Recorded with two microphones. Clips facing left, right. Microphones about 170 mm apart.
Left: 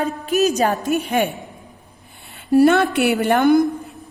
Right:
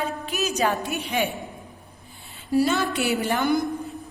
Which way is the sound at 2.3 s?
60° left (ahead or behind).